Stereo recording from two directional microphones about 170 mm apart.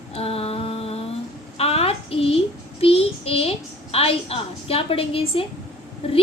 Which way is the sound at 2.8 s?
35° left (ahead or behind).